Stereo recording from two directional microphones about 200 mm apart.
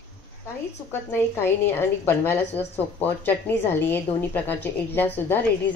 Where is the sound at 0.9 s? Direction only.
10° left (ahead or behind).